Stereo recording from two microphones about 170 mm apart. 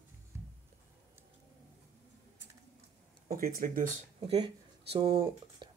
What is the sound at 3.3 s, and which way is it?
Speech, 50° right (ahead or behind).